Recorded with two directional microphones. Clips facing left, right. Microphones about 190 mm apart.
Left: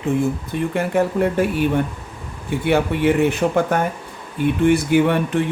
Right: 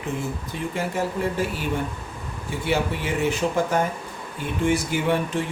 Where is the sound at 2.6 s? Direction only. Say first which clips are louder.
Left 8 dB; 60° left (ahead or behind).